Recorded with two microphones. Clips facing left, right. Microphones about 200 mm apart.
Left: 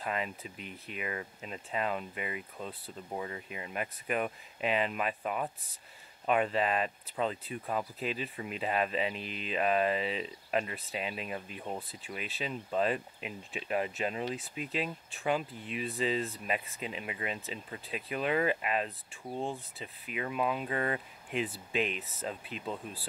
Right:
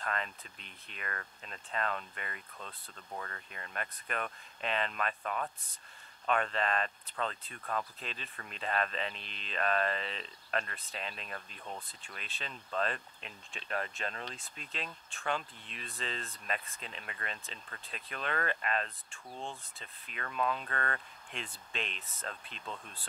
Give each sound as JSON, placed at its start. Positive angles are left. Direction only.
{"t": 0.0, "sound": "speech", "side_deg": 5}
{"t": 19.3, "sound": "speech", "side_deg": 35}
{"t": 19.8, "sound": "speech", "side_deg": 10}